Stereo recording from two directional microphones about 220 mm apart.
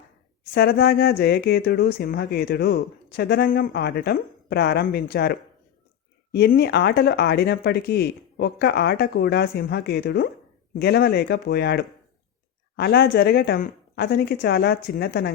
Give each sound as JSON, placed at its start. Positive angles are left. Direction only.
{"t": 0.5, "sound": "speech", "side_deg": 45}